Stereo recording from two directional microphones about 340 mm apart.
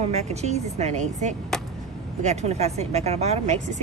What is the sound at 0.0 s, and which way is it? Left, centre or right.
Speech, centre.